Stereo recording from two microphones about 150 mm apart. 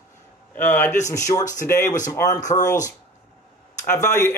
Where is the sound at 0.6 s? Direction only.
15° left (ahead or behind).